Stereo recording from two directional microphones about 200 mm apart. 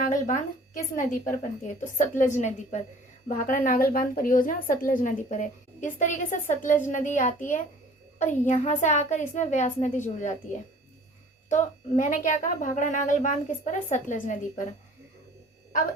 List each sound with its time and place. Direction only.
0.1 s a woman's voice: 40° left (ahead or behind)
11.4 s a woman's voice: 40° left (ahead or behind)